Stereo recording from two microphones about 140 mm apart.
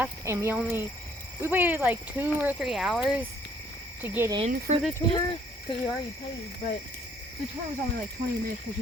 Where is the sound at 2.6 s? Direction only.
Centre (ahead or behind).